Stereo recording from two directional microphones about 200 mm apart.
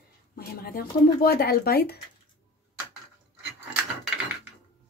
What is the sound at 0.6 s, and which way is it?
Speech, 50° left (ahead or behind).